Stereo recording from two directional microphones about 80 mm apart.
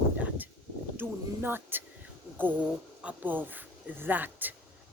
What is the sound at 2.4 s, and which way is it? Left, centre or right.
Speech, right.